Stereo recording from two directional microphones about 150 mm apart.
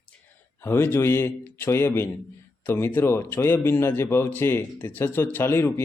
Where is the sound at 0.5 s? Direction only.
15° left (ahead or behind).